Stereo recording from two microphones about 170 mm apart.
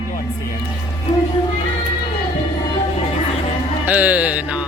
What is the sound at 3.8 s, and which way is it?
Speech, 10° right (ahead or behind).